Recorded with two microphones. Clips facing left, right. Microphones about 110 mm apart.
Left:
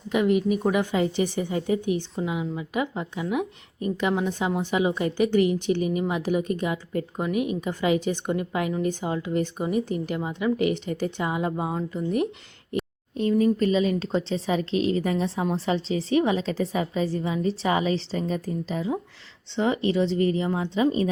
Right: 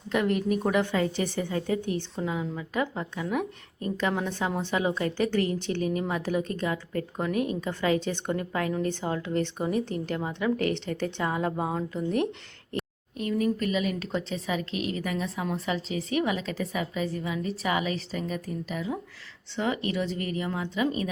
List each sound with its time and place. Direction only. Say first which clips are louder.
0.1 s a woman's voice: left 4 dB; 10° left (ahead or behind)
13.1 s speech: left 6 dB; 30° left (ahead or behind)